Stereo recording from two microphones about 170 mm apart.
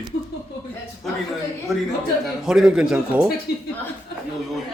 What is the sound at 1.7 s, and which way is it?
A man's voice, centre (ahead or behind).